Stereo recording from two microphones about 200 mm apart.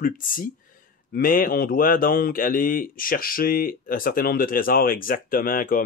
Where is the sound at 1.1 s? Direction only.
45° left (ahead or behind).